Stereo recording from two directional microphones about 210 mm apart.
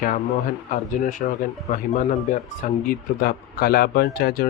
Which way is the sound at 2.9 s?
45° left (ahead or behind).